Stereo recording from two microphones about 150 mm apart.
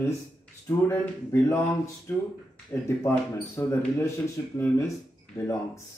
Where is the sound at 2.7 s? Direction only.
15° left (ahead or behind).